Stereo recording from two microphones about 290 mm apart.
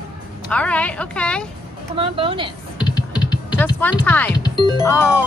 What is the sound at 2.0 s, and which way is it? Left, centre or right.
Speech, centre.